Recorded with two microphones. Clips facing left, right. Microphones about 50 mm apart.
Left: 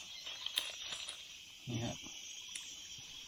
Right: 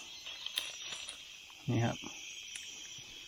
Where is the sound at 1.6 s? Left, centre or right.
Right.